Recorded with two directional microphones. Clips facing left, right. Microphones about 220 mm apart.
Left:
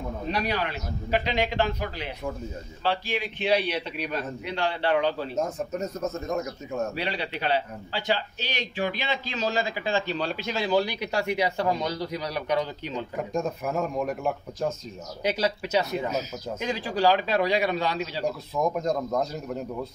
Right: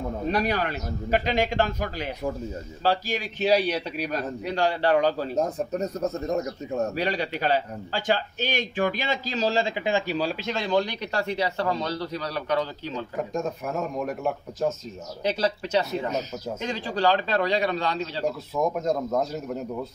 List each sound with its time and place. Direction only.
0.3 s a man's voice: 45° right (ahead or behind); by 13.0 s 15° left (ahead or behind)
13.3 s speech: centre (ahead or behind)
18.8 s speech: 5° right (ahead or behind)